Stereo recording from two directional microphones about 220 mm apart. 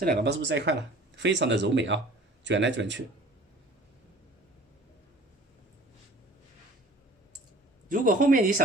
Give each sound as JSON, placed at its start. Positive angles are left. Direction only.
{"t": 0.0, "sound": "speech", "side_deg": -45}
{"t": 7.9, "sound": "speech", "side_deg": -40}